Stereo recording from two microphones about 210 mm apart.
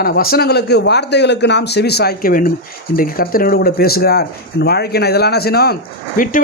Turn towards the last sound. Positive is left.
turn(degrees=40)  # may be behind; listen again after turning